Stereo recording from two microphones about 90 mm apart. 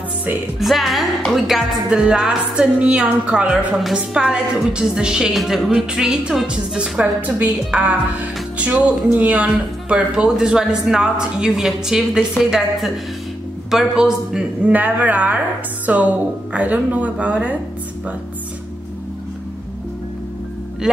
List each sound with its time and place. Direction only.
0.6 s speech: centre (ahead or behind)
7.2 s speech: 20° right (ahead or behind)
14.7 s speech: 20° right (ahead or behind)
20.8 s speech: 10° right (ahead or behind)